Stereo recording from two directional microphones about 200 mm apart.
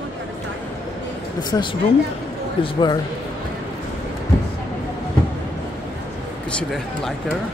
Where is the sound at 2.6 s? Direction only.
20° left (ahead or behind).